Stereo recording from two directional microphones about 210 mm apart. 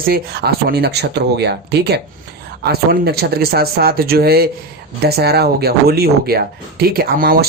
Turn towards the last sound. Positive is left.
turn(degrees=-45)  # may be behind; listen again after turning